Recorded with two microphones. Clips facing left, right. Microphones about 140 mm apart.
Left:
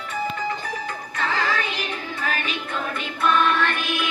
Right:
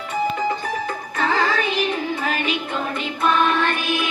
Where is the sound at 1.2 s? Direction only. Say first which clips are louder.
Right 4 dB; 35° right (ahead or behind).